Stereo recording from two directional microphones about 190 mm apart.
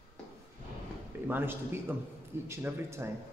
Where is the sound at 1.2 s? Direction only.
10° right (ahead or behind).